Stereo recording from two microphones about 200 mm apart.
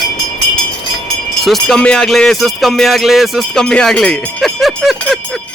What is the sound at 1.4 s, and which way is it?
Speech, centre (ahead or behind).